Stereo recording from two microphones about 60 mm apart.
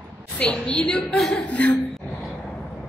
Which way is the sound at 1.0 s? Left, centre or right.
Centre.